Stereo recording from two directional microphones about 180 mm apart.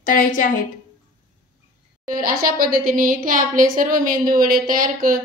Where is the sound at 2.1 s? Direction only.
55° right (ahead or behind).